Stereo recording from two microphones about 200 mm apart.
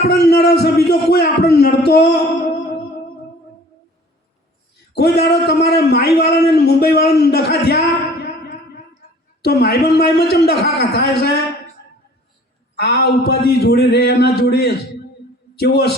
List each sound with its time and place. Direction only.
0.1 s a man's voice: 55° left (ahead or behind)
4.9 s a sound: 55° left (ahead or behind)
9.4 s a man's voice: 55° left (ahead or behind)
12.8 s a man's voice: 55° left (ahead or behind)